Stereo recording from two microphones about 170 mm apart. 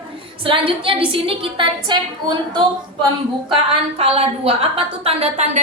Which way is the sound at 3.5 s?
35° right (ahead or behind).